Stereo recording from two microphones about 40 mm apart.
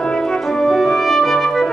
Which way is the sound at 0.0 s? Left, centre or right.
Centre.